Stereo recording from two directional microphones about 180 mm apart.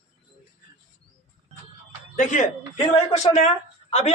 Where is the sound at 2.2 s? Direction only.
45° left (ahead or behind).